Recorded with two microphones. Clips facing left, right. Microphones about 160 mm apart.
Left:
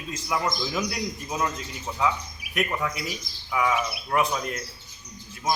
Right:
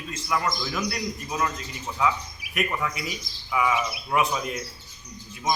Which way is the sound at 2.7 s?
5° left (ahead or behind).